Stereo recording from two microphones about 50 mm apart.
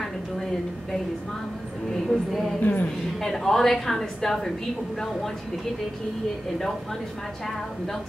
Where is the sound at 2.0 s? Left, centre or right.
Centre.